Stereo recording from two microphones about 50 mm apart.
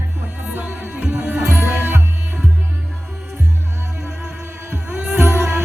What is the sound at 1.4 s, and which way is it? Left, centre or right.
Music, right.